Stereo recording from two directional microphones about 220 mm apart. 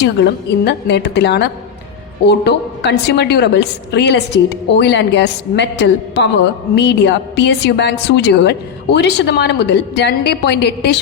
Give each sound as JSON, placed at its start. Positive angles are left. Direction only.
{"t": 0.0, "sound": "a woman's voice", "side_deg": 50}